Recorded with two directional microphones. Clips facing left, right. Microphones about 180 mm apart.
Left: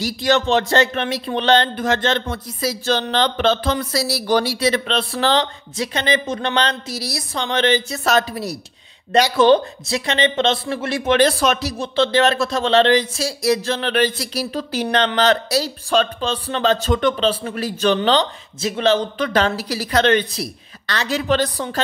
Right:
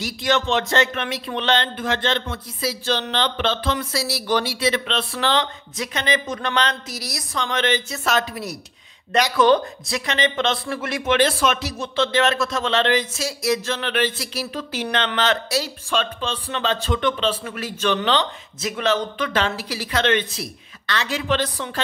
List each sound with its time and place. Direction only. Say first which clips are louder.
0.0 s speech: left 4 dB; 35° left (ahead or behind)